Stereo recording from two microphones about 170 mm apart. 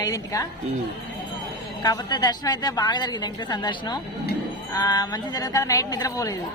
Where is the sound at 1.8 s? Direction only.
20° left (ahead or behind).